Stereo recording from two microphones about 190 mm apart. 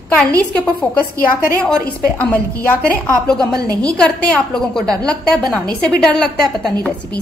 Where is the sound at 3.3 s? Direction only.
20° right (ahead or behind).